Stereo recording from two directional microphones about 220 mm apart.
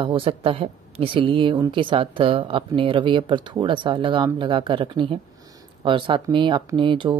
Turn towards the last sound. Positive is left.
turn(degrees=-20)  # may be behind; listen again after turning